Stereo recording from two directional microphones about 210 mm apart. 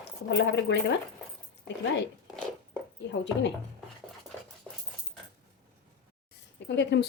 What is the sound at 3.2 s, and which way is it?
Speech, 55° left (ahead or behind).